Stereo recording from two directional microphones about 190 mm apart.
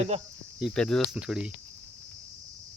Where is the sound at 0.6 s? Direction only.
5° left (ahead or behind).